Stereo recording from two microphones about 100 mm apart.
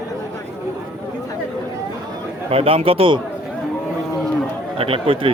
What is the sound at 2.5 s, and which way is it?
Speech, 75° right (ahead or behind).